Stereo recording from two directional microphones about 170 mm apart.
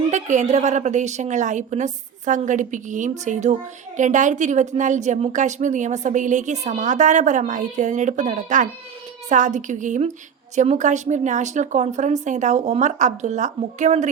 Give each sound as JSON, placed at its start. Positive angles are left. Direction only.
{"t": 0.1, "sound": "a woman's voice", "side_deg": -45}